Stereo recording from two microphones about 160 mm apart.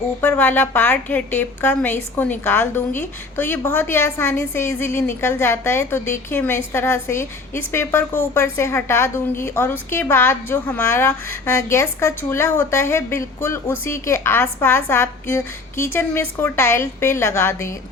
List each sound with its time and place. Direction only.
0.2 s a woman's voice: 15° left (ahead or behind)